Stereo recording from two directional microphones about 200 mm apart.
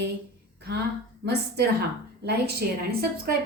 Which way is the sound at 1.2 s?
55° right (ahead or behind).